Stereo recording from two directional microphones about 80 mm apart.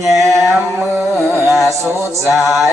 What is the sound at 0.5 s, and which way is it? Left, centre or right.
Carnatic music, right.